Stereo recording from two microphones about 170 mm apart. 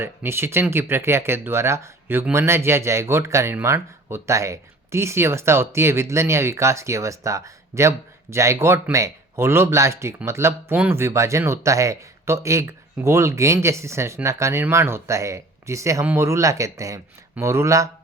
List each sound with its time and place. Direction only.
0.0 s speech: 15° right (ahead or behind)